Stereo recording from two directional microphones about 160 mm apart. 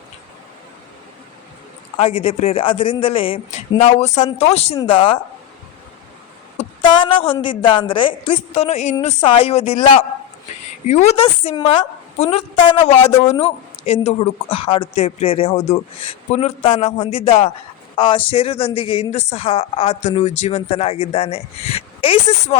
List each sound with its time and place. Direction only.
2.0 s speech: 40° left (ahead or behind)
3.8 s speech: 45° left (ahead or behind); by 5.2 s 30° left (ahead or behind)
6.6 s a sound: 35° left (ahead or behind)
7.6 s speech: 30° left (ahead or behind); by 11.1 s 45° left (ahead or behind)
11.2 s speech: 35° left (ahead or behind)